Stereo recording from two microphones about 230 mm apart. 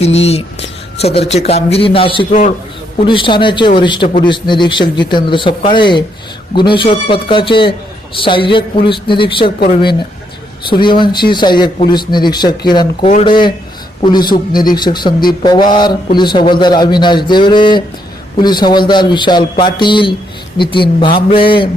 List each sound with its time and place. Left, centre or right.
0.0 s speech: left
10.7 s speech: left